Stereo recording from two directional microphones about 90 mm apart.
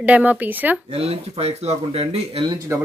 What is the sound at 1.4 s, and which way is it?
Speech, 90° right.